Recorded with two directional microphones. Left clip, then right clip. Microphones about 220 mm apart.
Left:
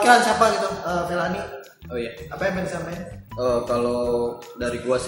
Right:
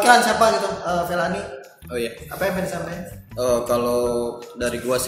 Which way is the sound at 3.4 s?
40° right (ahead or behind).